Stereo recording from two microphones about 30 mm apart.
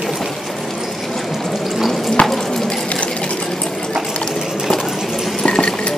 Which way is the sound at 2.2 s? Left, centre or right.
Left.